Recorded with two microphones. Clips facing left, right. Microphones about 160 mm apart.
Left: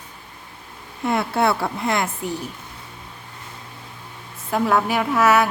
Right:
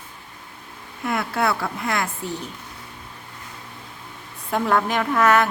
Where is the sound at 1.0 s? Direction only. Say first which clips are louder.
Left 3 dB; 25° left (ahead or behind).